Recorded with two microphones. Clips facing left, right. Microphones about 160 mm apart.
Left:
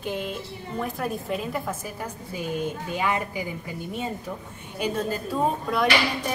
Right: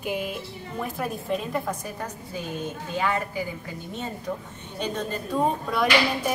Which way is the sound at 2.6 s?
15° left (ahead or behind).